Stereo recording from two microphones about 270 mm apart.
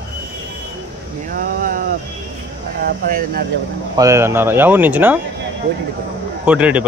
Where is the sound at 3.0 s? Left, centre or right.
Right.